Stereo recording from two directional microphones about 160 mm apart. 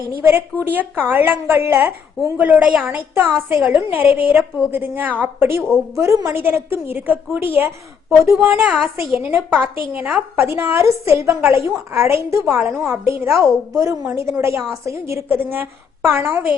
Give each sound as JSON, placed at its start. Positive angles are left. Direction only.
{"t": 0.2, "sound": "a woman's voice", "side_deg": -15}
{"t": 12.7, "sound": "a woman's voice", "side_deg": 0}
{"t": 13.1, "sound": "a woman's voice", "side_deg": -15}